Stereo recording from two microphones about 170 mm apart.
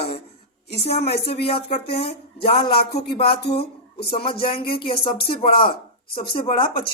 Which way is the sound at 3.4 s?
70° left (ahead or behind).